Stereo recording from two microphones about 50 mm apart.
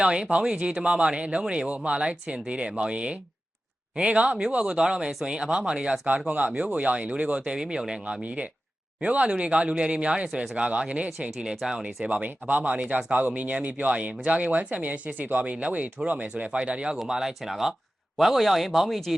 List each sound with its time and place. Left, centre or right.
0.0 s speech: centre
11.6 s speech: centre
12.0 s speech: right
17.1 s speech: centre